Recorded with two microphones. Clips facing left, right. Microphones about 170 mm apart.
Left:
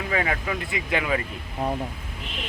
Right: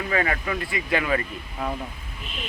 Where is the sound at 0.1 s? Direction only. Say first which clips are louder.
Right 1 dB; 10° left (ahead or behind).